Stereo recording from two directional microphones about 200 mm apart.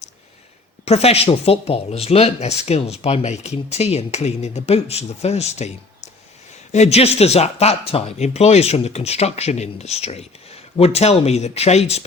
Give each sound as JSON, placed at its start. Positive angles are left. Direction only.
{"t": 0.9, "sound": "speech", "side_deg": 30}